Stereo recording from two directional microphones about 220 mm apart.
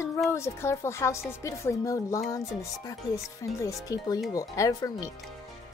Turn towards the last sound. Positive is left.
turn(degrees=15)  # may be behind; listen again after turning